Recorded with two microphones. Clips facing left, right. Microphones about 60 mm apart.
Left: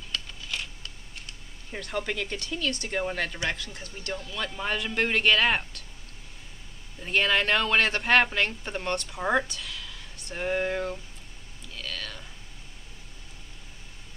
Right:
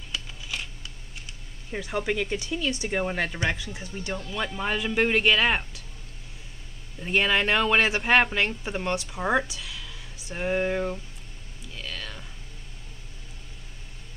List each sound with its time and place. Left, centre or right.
0.1 s camera: centre
3.4 s speech: centre
7.0 s speech: centre
11.7 s a sound: centre